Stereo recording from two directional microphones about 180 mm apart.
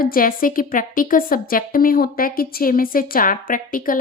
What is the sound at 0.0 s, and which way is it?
A woman's voice, 50° left (ahead or behind).